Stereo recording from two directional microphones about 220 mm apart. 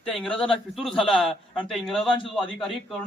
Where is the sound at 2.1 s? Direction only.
20° left (ahead or behind).